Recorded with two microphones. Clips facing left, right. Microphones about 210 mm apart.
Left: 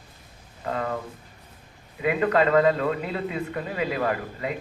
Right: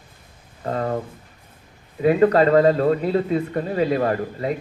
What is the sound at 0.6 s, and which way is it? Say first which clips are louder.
Speech: right 4 dB; 40° right (ahead or behind).